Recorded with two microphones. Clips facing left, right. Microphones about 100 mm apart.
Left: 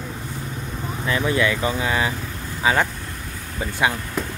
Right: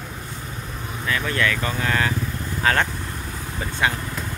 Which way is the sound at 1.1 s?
20° left (ahead or behind).